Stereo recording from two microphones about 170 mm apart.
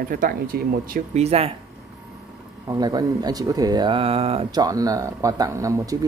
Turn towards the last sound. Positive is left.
turn(degrees=-20)  # may be behind; listen again after turning